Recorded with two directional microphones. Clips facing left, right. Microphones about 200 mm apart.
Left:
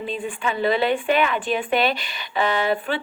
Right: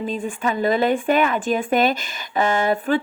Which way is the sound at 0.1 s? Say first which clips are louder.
Right 3 dB; 45° right (ahead or behind).